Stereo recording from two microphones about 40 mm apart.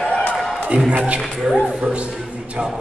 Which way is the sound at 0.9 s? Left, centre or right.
Right.